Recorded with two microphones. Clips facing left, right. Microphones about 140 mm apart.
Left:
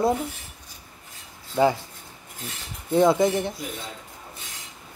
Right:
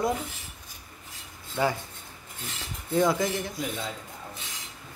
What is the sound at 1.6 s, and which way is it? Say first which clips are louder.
Cutlery: left 6 dB; 25° left (ahead or behind).